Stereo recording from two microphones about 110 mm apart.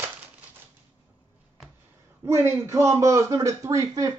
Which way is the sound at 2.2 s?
25° right (ahead or behind).